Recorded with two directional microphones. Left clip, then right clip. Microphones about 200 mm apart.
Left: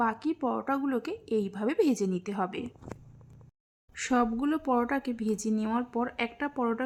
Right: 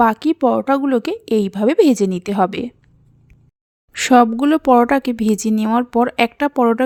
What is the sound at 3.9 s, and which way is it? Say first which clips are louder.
A woman's voice: right 16 dB; 40° right (ahead or behind).